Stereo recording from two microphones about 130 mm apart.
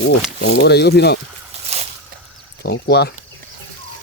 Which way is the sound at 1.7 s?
60° right (ahead or behind).